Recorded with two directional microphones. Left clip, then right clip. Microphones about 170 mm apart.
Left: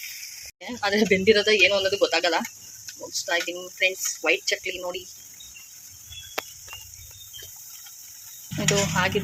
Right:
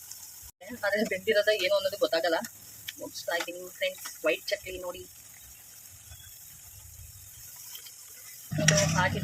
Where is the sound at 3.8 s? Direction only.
35° left (ahead or behind).